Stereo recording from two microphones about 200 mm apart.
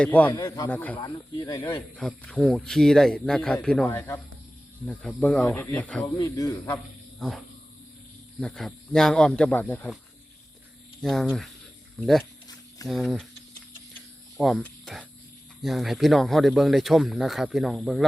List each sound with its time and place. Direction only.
0.0 s speech: 10° left (ahead or behind)
0.9 s speech: 20° left (ahead or behind)
2.0 s speech: 5° left (ahead or behind)
6.1 s speech: 15° left (ahead or behind)
7.2 s speech: centre (ahead or behind)
11.0 s speech: centre (ahead or behind)
14.3 s speech: centre (ahead or behind)